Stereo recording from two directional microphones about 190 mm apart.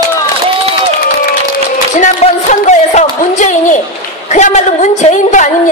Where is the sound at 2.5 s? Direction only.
40° left (ahead or behind).